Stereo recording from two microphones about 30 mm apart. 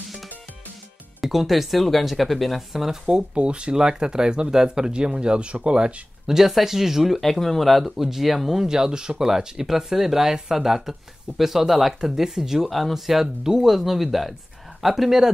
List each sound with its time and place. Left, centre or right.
1.2 s speech: centre
3.1 s speech: right
3.7 s speech: right
6.2 s speech: centre
7.2 s speech: centre
7.8 s speech: centre; by 9.3 s right
9.7 s speech: centre
13.4 s speech: centre
13.7 s speech: centre